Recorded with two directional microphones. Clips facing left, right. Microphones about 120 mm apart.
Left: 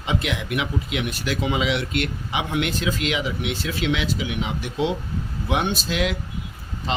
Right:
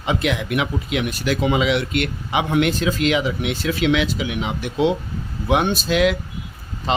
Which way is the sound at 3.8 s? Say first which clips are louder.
Right 5 dB; 70° right (ahead or behind).